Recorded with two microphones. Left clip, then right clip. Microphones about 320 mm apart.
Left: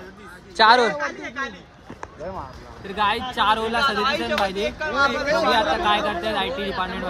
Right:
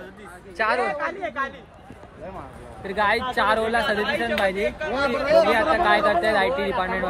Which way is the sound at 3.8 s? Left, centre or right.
Centre.